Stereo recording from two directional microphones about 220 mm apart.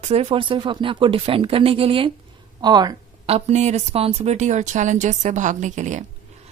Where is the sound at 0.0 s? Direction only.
30° right (ahead or behind).